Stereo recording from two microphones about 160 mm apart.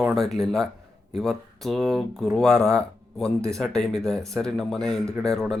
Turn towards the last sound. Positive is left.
turn(degrees=5)  # may be behind; listen again after turning